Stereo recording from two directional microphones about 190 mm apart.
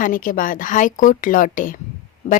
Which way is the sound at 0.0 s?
45° left (ahead or behind).